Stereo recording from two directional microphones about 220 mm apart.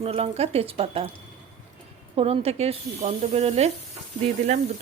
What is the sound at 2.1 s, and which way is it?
A woman's voice, 25° right (ahead or behind).